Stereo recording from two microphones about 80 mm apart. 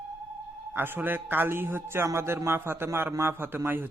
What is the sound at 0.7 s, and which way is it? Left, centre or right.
A man's voice, right.